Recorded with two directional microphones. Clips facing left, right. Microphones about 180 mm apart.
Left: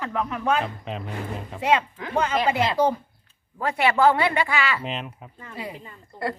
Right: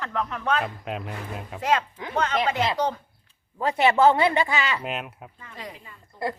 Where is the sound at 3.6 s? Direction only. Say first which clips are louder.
Right 1 dB; 20° right (ahead or behind).